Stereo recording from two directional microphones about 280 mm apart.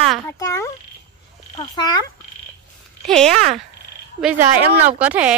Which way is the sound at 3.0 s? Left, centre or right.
Centre.